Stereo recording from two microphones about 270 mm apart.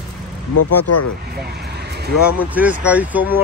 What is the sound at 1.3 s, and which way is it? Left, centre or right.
Vehicle, right.